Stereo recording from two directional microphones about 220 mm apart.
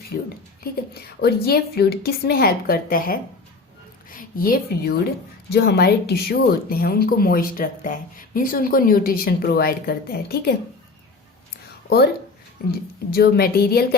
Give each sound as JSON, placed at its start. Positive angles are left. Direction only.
{"t": 0.6, "sound": "a woman's voice", "side_deg": 45}
{"t": 13.1, "sound": "speech", "side_deg": 45}